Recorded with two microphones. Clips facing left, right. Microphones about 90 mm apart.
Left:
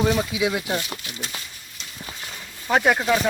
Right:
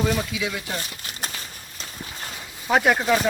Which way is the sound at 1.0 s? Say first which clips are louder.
Right 1 dB; 45° right (ahead or behind).